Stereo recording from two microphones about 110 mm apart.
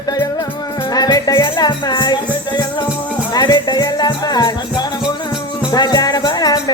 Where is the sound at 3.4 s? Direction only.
40° left (ahead or behind).